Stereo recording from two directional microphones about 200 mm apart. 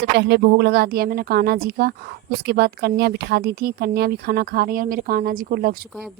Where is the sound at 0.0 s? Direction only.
55° right (ahead or behind).